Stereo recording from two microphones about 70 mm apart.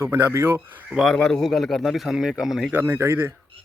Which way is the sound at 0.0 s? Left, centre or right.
Right.